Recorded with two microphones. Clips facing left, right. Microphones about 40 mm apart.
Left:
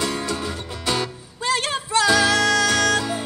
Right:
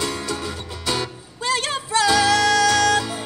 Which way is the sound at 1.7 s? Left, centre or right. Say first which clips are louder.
Even; left.